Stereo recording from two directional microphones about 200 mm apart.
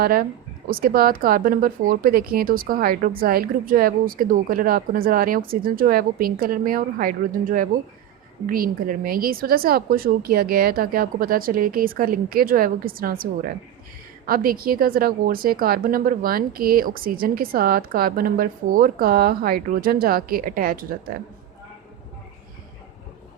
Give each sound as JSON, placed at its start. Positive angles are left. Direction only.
{"t": 0.0, "sound": "speech", "side_deg": -45}